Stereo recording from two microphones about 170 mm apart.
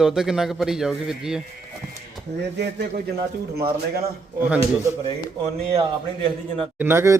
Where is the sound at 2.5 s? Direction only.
65° right (ahead or behind).